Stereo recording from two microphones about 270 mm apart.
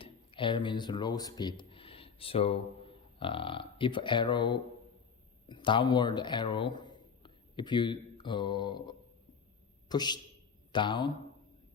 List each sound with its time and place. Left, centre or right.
0.0 s a man's voice: centre